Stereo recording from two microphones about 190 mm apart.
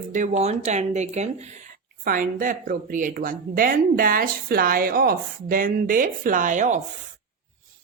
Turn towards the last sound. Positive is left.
turn(degrees=-40)  # may be behind; listen again after turning